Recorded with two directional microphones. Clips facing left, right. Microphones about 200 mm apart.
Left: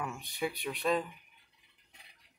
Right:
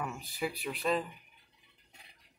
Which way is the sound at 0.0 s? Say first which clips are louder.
Even; centre (ahead or behind).